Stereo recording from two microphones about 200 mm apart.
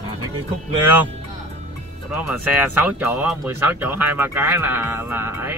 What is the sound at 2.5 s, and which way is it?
Speech, 10° right (ahead or behind).